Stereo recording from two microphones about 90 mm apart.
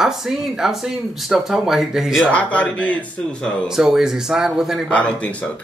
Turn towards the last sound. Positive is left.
turn(degrees=15)  # may be behind; listen again after turning